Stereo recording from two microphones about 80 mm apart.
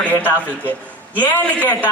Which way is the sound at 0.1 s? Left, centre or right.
Left.